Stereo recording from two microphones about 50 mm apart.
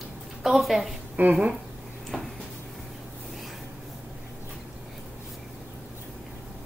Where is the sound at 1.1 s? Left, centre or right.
Right.